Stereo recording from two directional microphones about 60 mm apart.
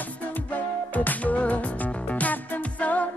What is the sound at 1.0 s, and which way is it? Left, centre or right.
Music, left.